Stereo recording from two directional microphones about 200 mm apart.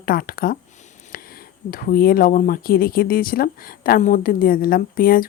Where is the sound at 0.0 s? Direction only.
45° left (ahead or behind).